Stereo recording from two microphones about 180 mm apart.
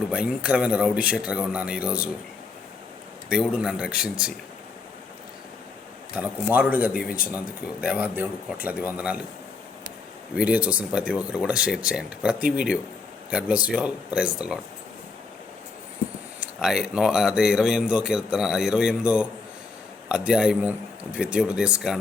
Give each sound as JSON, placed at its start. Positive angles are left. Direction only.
{"t": 0.1, "sound": "speech", "side_deg": -5}
{"t": 3.2, "sound": "speech", "side_deg": -5}
{"t": 6.1, "sound": "speech", "side_deg": -5}
{"t": 7.0, "sound": "speech", "side_deg": 55}
{"t": 7.9, "sound": "speech", "side_deg": -10}
{"t": 10.3, "sound": "speech", "side_deg": -10}
{"t": 16.4, "sound": "speech", "side_deg": -5}